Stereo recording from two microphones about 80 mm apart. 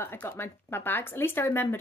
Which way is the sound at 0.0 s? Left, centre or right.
Left.